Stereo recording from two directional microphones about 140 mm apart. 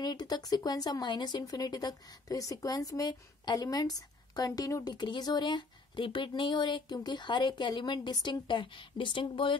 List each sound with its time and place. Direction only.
0.0 s speech: 30° left (ahead or behind)